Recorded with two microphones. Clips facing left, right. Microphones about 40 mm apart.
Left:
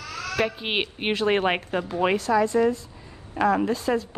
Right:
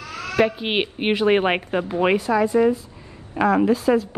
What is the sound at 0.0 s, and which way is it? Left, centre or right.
Bleat, right.